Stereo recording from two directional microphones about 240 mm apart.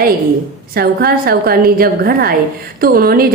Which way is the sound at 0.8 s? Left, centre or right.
Right.